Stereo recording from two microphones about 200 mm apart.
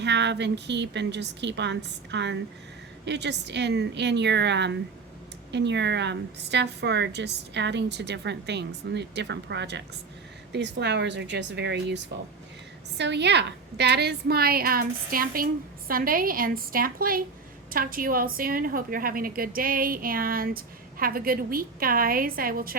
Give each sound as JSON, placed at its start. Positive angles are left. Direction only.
{"t": 0.0, "sound": "a woman's voice", "side_deg": -60}